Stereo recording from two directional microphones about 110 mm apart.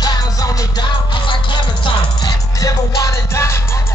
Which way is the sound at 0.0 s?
40° left (ahead or behind).